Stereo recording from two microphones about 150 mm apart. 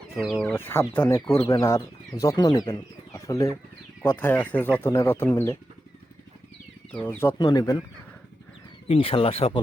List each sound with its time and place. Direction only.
0.1 s speech: centre (ahead or behind)
0.5 s speech: 15° left (ahead or behind)
7.0 s speech: 15° left (ahead or behind)
7.3 s speech: 25° left (ahead or behind)
8.9 s speech: 40° left (ahead or behind)